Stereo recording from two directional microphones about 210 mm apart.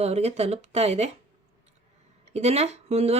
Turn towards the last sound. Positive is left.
turn(degrees=-30)  # may be behind; listen again after turning